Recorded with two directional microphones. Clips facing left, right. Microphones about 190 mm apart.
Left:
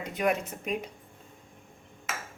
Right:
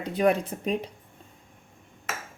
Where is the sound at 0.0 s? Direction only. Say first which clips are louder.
Right 5 dB; 35° right (ahead or behind).